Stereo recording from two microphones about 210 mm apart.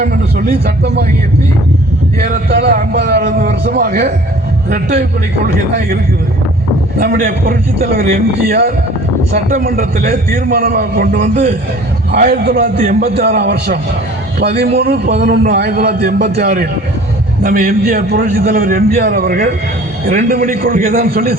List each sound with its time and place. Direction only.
0.0 s a man's voice: 45° right (ahead or behind)
2.2 s a man's voice: 50° right (ahead or behind)
5.5 s a man's voice: 45° right (ahead or behind)
7.0 s a man's voice: 45° right (ahead or behind)